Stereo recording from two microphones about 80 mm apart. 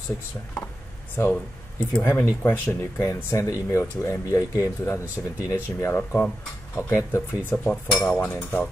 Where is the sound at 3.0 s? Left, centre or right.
Left.